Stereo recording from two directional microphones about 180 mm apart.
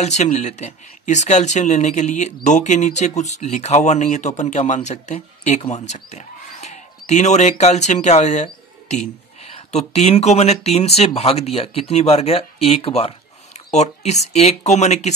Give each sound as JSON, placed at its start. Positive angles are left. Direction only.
{"t": 0.0, "sound": "speech", "side_deg": 40}